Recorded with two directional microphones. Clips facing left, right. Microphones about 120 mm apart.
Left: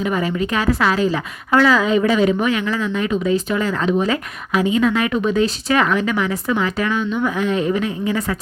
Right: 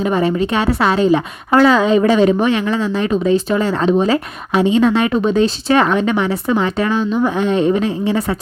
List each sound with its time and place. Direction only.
0.0 s a woman's voice: 30° right (ahead or behind)